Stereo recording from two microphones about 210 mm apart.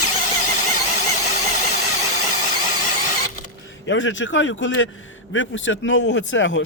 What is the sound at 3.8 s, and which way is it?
A man's voice, 65° left (ahead or behind).